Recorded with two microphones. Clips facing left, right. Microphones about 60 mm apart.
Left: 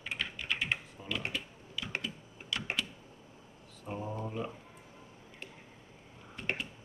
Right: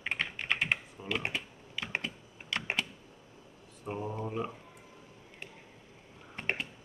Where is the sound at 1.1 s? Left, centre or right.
Right.